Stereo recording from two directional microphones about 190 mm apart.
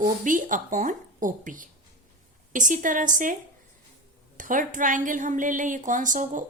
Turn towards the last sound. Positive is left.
turn(degrees=-40)  # may be behind; listen again after turning